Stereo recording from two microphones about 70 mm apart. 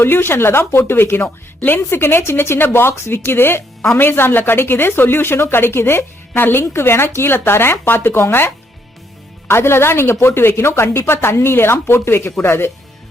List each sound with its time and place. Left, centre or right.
0.0 s speech: left